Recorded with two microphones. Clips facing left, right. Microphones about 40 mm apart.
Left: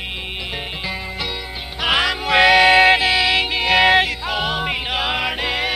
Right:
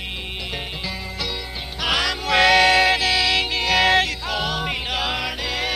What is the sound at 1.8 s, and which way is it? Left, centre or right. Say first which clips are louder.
Music: left 4 dB; left.